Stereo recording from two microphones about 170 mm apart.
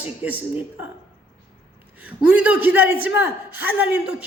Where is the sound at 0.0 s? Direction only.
10° right (ahead or behind).